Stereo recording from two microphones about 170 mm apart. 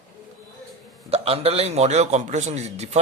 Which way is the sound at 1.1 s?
35° right (ahead or behind).